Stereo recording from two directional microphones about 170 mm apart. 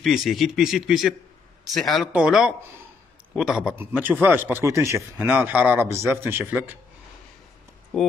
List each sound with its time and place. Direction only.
0.0 s a man's voice: centre (ahead or behind)